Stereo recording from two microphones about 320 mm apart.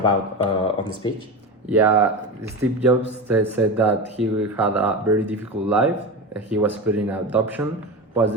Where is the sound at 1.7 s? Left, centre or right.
Centre.